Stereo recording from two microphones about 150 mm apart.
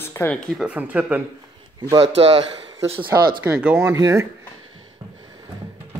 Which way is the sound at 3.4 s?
10° right (ahead or behind).